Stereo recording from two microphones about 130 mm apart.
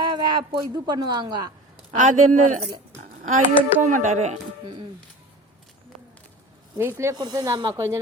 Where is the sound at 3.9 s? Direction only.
80° right; by 4.4 s 65° right (ahead or behind).